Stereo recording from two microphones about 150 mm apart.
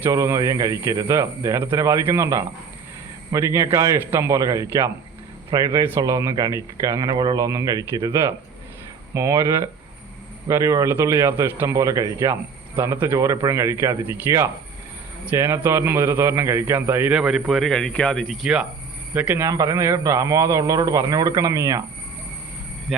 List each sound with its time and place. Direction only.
0.0 s a man's voice: 20° right (ahead or behind); by 18.6 s centre (ahead or behind)
19.1 s speech: 10° right (ahead or behind)
22.9 s speech: centre (ahead or behind)